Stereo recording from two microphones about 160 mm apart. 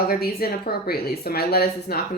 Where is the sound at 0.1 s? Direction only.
75° left (ahead or behind).